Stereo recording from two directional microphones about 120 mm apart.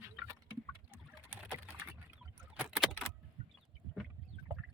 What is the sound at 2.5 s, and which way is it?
Vehicle, 5° right (ahead or behind).